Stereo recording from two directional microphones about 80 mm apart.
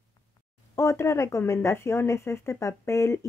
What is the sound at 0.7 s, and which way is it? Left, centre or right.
Speech, left.